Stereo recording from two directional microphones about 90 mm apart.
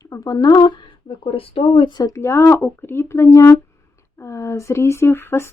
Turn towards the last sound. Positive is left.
turn(degrees=25)  # may be behind; listen again after turning